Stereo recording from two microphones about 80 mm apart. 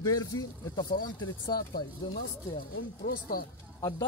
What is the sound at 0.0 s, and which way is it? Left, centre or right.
Speech, left.